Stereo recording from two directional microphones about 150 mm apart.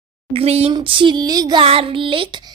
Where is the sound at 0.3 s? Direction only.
45° right (ahead or behind).